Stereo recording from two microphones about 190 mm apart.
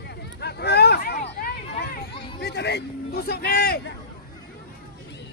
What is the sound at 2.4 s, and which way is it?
A man's voice, 60° left (ahead or behind).